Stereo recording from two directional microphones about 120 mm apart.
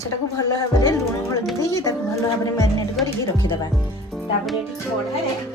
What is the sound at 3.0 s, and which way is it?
Speech, 35° left (ahead or behind).